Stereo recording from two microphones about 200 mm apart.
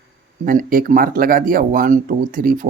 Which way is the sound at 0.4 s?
45° right (ahead or behind).